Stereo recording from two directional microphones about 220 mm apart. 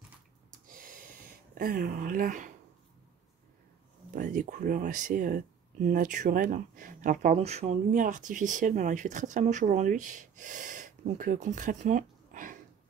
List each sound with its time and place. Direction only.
0.5 s a sound: 40° right (ahead or behind)
1.6 s speech: 40° right (ahead or behind)
4.1 s speech: 35° right (ahead or behind)